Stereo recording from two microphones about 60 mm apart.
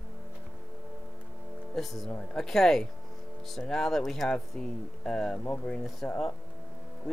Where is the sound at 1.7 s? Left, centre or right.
Centre.